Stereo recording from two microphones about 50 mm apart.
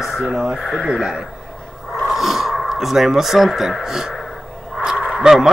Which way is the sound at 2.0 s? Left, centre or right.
Centre.